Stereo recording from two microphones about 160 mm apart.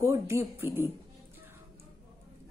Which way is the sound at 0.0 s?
15° right (ahead or behind).